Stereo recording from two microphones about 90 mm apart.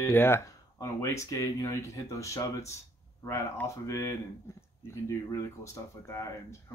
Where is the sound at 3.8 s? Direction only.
35° left (ahead or behind).